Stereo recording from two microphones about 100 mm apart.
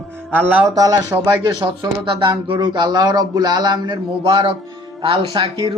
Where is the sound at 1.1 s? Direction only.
20° right (ahead or behind).